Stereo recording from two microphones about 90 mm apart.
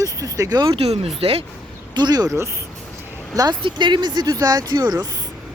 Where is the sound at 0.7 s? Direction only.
90° right.